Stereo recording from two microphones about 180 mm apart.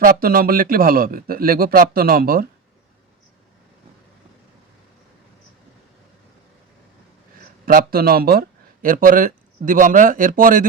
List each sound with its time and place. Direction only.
0.0 s speech: 55° right (ahead or behind)
7.6 s speech: 55° right (ahead or behind)